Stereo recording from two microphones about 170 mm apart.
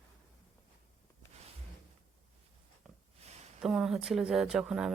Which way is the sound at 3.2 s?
35° right (ahead or behind).